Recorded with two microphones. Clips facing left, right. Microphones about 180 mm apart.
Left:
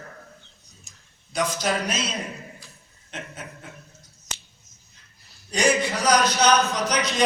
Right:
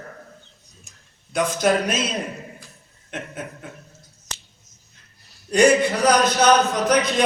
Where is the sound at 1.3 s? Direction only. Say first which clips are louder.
Right 5 dB; 55° right (ahead or behind).